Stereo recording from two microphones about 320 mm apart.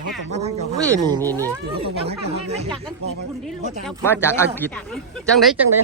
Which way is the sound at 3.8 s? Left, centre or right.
Centre.